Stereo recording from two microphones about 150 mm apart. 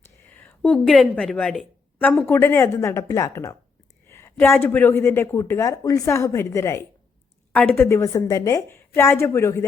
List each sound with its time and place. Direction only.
0.3 s a woman's voice: 10° left (ahead or behind)
4.0 s a sound: 15° left (ahead or behind)
4.6 s a woman's voice: 15° left (ahead or behind)